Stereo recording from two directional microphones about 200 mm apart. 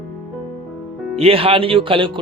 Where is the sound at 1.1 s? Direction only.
30° right (ahead or behind).